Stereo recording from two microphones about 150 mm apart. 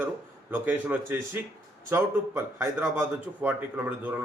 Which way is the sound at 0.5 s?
10° right (ahead or behind).